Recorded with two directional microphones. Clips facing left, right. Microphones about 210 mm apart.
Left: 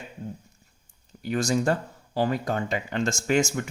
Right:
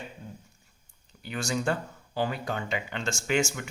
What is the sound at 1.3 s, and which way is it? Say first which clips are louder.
Speech: left 5 dB; 40° left (ahead or behind).